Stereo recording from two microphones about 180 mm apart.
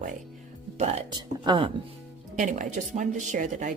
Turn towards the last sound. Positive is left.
turn(degrees=-45)  # may be behind; listen again after turning